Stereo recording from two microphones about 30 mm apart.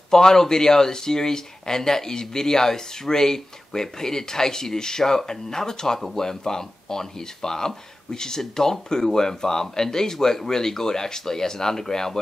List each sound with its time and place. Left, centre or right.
0.1 s speech: centre